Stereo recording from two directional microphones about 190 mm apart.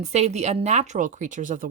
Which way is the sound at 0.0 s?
35° right (ahead or behind).